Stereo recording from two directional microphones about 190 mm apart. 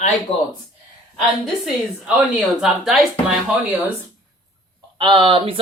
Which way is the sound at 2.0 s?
Centre (ahead or behind).